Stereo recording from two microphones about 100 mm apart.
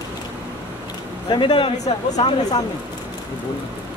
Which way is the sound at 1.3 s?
55° left (ahead or behind).